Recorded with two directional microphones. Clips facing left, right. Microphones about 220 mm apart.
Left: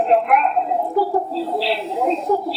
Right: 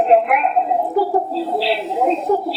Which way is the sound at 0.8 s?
25° right (ahead or behind).